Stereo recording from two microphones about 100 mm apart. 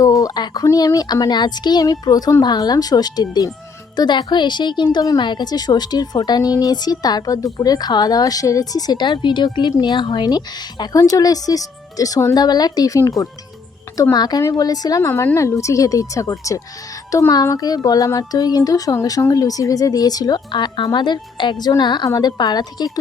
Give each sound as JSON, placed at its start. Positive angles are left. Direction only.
{"t": 0.0, "sound": "speech", "side_deg": 35}
{"t": 15.1, "sound": "speech", "side_deg": 25}